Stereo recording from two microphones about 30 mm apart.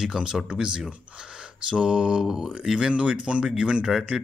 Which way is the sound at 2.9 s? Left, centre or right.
Right.